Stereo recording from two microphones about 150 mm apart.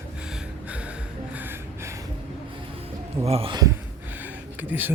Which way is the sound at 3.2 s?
40° right (ahead or behind).